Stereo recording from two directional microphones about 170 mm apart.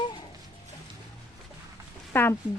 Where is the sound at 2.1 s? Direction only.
10° left (ahead or behind).